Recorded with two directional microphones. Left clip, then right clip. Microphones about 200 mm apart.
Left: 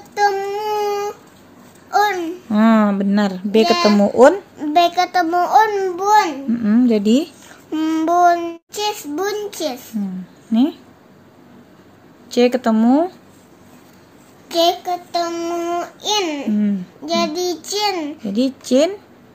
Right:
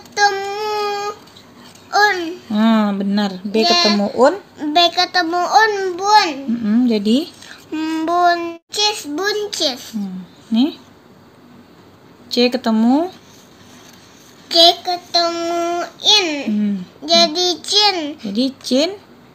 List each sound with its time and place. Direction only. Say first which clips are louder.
0.1 s child singing: right 1 dB; 20° left (ahead or behind)
1.9 s babbling: right 2 dB; 20° left (ahead or behind)
3.6 s a child's voice: right 2 dB; 25° left (ahead or behind)
7.4 s child singing: left 2 dB; 25° left (ahead or behind)
10.5 s speech: even; 5° left (ahead or behind)
12.4 s speech: left 1 dB; 5° left (ahead or behind)
14.5 s a child's voice: right 5 dB; 20° left (ahead or behind)